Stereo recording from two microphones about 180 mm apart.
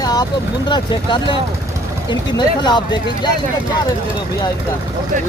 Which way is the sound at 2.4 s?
25° left (ahead or behind).